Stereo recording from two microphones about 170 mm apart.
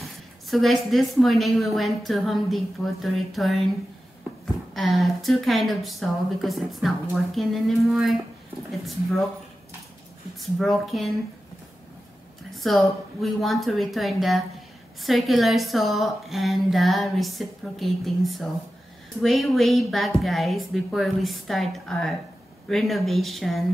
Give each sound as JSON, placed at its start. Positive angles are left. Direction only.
{"t": 0.0, "sound": "a woman's voice", "side_deg": 0}
{"t": 4.7, "sound": "a woman's voice", "side_deg": 0}
{"t": 10.4, "sound": "a woman's voice", "side_deg": 0}
{"t": 12.5, "sound": "a woman's voice", "side_deg": 0}